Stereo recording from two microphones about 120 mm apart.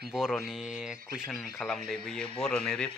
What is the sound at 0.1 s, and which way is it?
A man's voice, centre (ahead or behind).